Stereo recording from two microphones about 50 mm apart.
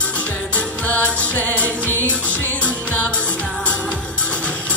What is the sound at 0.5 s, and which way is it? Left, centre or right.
Music, left.